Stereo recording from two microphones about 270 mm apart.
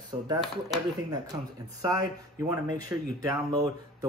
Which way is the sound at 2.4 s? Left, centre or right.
Centre.